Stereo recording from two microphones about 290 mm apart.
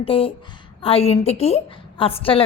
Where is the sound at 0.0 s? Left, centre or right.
Centre.